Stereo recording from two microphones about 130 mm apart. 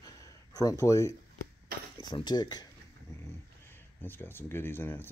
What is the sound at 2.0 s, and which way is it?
Speech, 35° left (ahead or behind).